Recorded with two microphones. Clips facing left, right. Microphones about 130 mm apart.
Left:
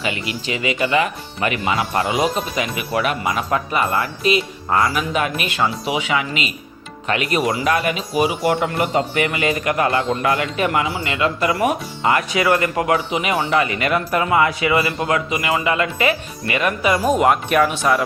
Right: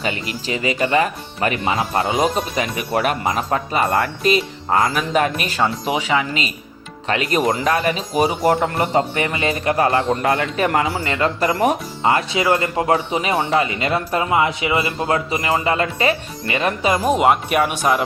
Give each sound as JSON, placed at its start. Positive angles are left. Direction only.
{"t": 0.0, "sound": "speech", "side_deg": -35}
{"t": 10.7, "sound": "a man's voice", "side_deg": -45}
{"t": 17.1, "sound": "speech", "side_deg": -5}